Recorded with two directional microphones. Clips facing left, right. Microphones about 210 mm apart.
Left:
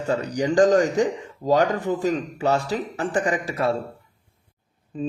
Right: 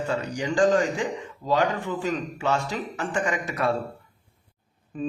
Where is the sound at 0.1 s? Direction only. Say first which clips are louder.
Left 8 dB; 40° left (ahead or behind).